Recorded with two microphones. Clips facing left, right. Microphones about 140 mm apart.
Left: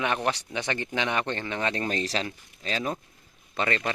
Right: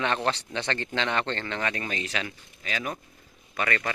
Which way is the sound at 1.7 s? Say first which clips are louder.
Left 4 dB; 35° left (ahead or behind).